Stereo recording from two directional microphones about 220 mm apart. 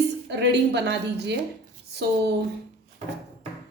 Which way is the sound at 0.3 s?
50° right (ahead or behind).